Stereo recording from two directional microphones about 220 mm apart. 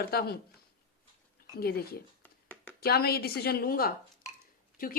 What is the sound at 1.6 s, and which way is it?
Speech, 45° left (ahead or behind).